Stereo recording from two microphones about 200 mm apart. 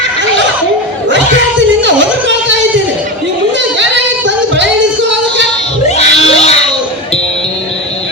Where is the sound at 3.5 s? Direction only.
65° right (ahead or behind).